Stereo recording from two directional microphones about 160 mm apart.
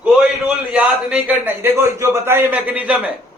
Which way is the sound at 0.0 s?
5° right (ahead or behind).